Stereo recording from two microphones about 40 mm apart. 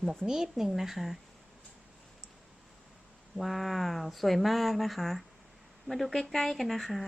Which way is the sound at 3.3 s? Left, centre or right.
Centre.